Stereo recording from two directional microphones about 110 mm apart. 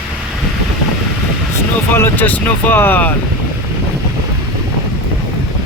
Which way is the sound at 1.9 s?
20° left (ahead or behind).